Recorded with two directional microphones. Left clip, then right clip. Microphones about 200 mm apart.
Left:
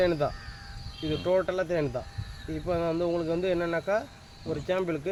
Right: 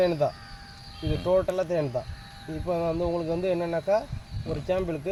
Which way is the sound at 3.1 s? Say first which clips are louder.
Right 1 dB; 15° right (ahead or behind).